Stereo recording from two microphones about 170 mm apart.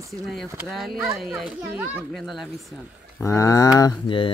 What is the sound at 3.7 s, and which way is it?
Mantra, 25° left (ahead or behind).